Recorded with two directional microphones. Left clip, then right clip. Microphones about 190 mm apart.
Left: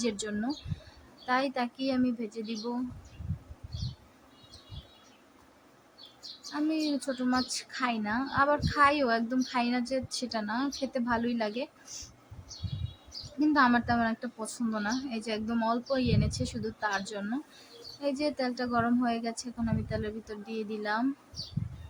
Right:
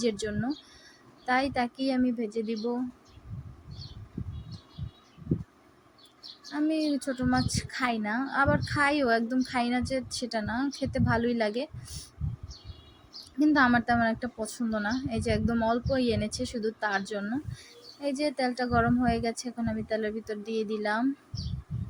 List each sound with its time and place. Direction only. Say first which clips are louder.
0.0 s a woman's voice: right 3 dB; 10° right (ahead or behind)
6.5 s a woman's voice: right 2 dB; 15° right (ahead or behind)
13.4 s a woman's voice: right 2 dB; 15° right (ahead or behind)